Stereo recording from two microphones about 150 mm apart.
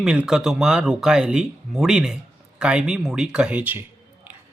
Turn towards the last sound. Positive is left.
turn(degrees=-10)  # may be behind; listen again after turning